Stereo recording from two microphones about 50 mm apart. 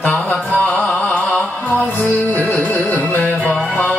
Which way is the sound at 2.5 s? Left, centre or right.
Left.